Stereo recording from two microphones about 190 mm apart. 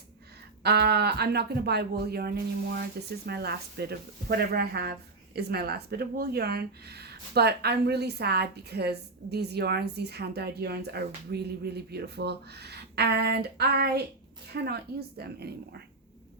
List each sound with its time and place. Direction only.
0.6 s speech: 60° right (ahead or behind)